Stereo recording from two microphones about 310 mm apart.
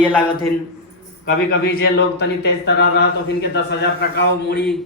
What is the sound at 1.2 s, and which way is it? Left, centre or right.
A man's voice, left.